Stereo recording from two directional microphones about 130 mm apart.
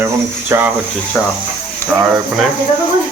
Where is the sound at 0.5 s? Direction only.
20° right (ahead or behind).